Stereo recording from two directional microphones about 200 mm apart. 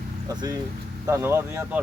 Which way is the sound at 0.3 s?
20° right (ahead or behind).